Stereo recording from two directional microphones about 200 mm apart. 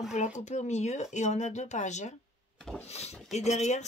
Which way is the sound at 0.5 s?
35° left (ahead or behind).